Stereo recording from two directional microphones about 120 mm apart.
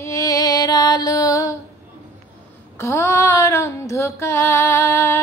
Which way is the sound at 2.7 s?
25° left (ahead or behind).